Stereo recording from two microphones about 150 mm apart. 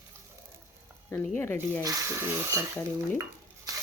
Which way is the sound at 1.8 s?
20° right (ahead or behind).